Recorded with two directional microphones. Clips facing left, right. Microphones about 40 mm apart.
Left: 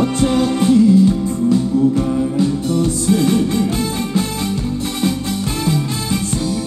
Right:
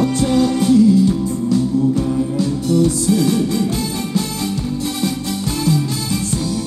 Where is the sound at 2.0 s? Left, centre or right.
Left.